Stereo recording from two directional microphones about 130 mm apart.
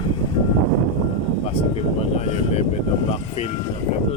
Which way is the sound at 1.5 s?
55° left (ahead or behind).